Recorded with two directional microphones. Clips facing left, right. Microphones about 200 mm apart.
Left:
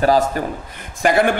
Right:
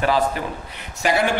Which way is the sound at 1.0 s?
55° left (ahead or behind).